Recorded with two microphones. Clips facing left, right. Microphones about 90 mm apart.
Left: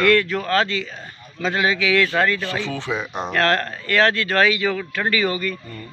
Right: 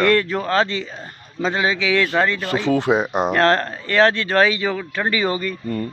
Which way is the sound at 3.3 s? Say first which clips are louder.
Right 1 dB; 25° right (ahead or behind).